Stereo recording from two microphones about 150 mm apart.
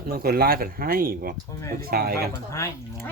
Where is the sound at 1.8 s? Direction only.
90° right.